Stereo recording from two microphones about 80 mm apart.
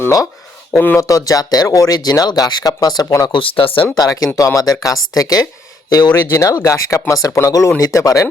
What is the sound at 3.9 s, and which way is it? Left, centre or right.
Speech, left.